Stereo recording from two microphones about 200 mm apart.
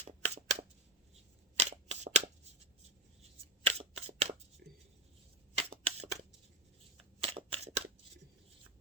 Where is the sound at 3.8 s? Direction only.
30° right (ahead or behind).